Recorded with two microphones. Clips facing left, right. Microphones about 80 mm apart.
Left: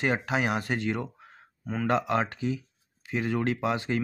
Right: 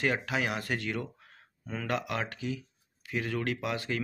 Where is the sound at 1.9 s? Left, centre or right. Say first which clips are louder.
Left 7 dB; left.